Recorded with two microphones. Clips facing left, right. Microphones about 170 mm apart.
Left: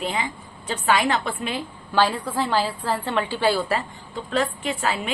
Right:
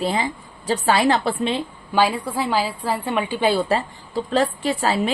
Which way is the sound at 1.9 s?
10° right (ahead or behind).